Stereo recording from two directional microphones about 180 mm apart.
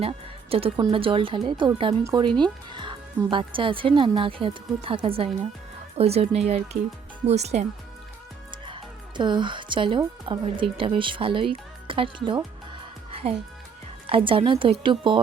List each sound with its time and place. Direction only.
0.8 s a woman's voice: 25° right (ahead or behind)
8.6 s speech: 25° right (ahead or behind)
13.1 s music: 30° right (ahead or behind)
14.1 s speech: 30° right (ahead or behind)